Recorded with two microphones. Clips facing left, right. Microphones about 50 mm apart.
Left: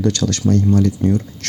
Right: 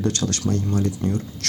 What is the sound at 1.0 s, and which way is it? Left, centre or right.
Speech, left.